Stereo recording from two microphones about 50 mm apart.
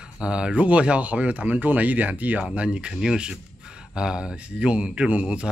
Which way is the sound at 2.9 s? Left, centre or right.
Centre.